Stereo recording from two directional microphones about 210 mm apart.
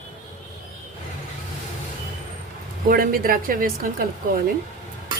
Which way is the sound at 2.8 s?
45° right (ahead or behind).